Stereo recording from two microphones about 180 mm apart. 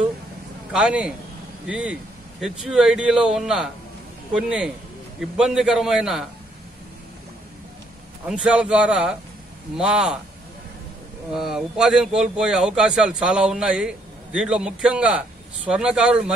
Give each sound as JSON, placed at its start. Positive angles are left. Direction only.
{"t": 0.7, "sound": "speech", "side_deg": -5}
{"t": 8.3, "sound": "speech", "side_deg": -5}
{"t": 11.3, "sound": "speech", "side_deg": 0}